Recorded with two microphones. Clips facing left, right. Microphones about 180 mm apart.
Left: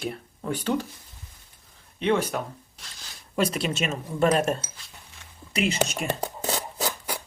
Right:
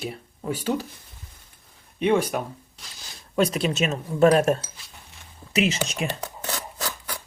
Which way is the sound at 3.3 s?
Centre (ahead or behind).